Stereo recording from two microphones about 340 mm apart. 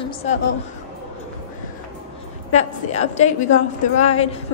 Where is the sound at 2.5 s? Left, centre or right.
Centre.